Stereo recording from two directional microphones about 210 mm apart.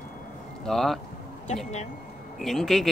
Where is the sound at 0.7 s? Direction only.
Centre (ahead or behind).